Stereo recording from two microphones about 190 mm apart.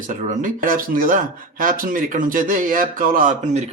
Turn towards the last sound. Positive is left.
turn(degrees=-45)  # may be behind; listen again after turning